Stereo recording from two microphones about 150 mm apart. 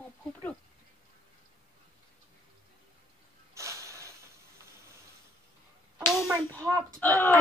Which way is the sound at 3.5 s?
20° right (ahead or behind).